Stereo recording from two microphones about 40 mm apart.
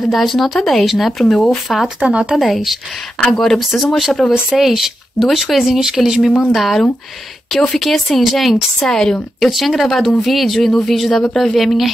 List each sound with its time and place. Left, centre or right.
0.1 s speech: centre
2.0 s speech: right
2.3 s speech: centre
6.4 s speech: centre
8.8 s a woman's voice: centre
9.4 s speech: centre